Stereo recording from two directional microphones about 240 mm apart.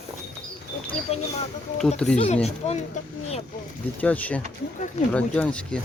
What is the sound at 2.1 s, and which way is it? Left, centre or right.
Speech, left.